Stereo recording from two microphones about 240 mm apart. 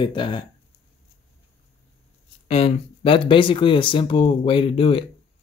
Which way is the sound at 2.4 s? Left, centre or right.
Left.